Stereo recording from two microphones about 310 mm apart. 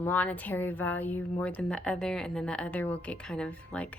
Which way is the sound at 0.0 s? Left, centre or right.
Centre.